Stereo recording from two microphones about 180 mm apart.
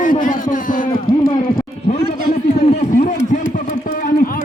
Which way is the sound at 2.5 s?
35° left (ahead or behind).